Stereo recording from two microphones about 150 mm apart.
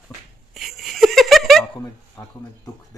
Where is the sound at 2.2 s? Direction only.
25° left (ahead or behind).